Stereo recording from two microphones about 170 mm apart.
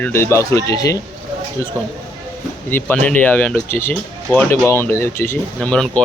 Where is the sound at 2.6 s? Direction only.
10° left (ahead or behind).